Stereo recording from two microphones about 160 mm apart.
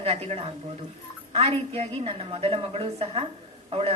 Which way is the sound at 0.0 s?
40° right (ahead or behind).